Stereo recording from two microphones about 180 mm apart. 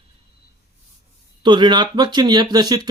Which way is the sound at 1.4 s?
25° right (ahead or behind).